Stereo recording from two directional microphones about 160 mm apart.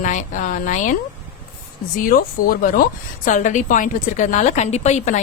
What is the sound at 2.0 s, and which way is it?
A woman's voice, 65° left (ahead or behind).